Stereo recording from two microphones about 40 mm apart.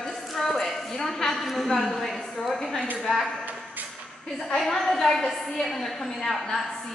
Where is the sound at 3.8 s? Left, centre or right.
Right.